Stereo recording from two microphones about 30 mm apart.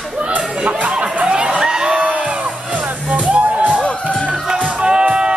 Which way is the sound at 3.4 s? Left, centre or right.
Right.